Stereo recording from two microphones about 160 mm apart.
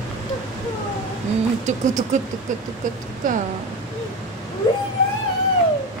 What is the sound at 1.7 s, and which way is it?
Speech, 50° right (ahead or behind).